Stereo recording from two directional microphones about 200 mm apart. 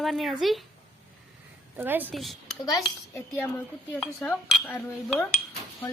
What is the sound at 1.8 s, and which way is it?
Speech, 10° right (ahead or behind).